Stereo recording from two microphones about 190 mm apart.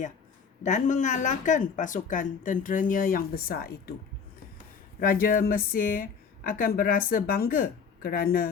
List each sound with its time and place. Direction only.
0.6 s a woman's voice: 40° left (ahead or behind)
4.9 s a woman's voice: 50° left (ahead or behind)